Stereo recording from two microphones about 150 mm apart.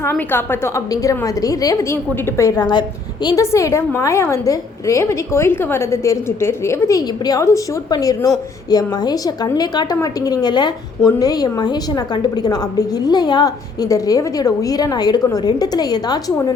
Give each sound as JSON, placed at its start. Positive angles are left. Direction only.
{"t": 0.0, "sound": "a woman's voice", "side_deg": 15}